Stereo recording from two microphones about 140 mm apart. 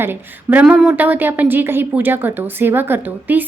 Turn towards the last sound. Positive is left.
turn(degrees=-15)  # may be behind; listen again after turning